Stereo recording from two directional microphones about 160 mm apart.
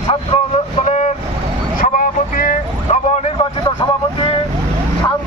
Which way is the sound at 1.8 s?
60° left (ahead or behind).